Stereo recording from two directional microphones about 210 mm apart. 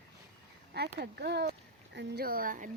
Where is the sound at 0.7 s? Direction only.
50° right (ahead or behind).